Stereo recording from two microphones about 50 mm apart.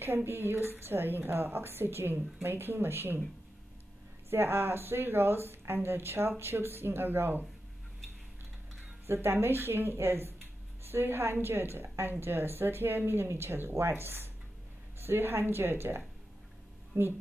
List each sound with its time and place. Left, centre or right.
0.0 s speech: right
4.3 s speech: right
9.0 s a woman's voice: right